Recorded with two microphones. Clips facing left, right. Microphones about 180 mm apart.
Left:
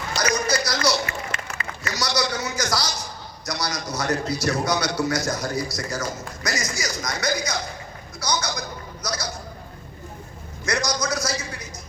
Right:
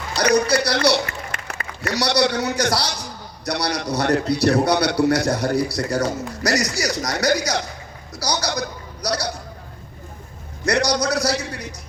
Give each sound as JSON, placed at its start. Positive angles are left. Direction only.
{"t": 0.2, "sound": "a man's voice", "side_deg": -65}
{"t": 8.2, "sound": "a man's voice", "side_deg": -35}
{"t": 9.0, "sound": "a man's voice", "side_deg": -65}
{"t": 10.7, "sound": "a man's voice", "side_deg": -65}